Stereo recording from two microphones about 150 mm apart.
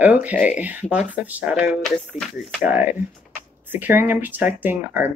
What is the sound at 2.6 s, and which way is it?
Speech, 15° right (ahead or behind).